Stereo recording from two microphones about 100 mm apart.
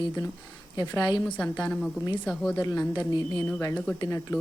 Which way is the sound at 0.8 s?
40° left (ahead or behind).